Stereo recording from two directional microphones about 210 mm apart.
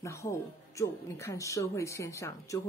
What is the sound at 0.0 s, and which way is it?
Speech, 15° left (ahead or behind).